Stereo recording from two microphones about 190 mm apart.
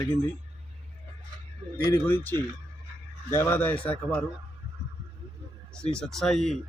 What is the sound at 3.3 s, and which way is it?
Speech, 10° left (ahead or behind).